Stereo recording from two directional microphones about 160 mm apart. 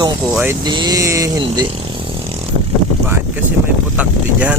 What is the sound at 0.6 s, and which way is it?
Speech, 25° right (ahead or behind).